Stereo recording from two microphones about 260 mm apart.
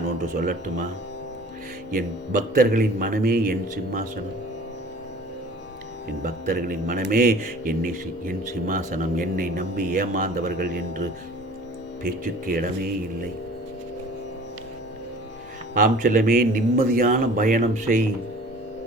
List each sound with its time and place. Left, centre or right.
0.2 s speech: right
2.0 s speech: right
6.2 s speech: right
12.0 s speech: right
15.8 s speech: right